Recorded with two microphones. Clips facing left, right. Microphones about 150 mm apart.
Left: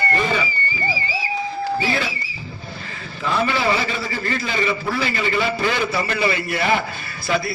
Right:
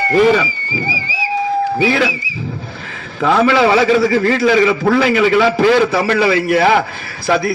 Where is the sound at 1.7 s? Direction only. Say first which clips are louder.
Right 8 dB; 90° right.